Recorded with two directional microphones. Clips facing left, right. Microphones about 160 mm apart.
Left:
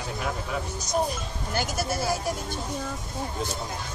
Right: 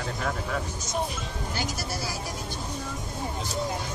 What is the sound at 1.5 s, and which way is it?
Speech, 50° left (ahead or behind).